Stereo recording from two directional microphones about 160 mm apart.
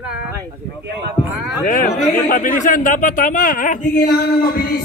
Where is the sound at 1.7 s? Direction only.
55° left (ahead or behind).